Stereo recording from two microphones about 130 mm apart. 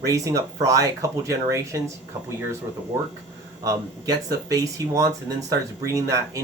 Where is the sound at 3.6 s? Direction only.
30° right (ahead or behind).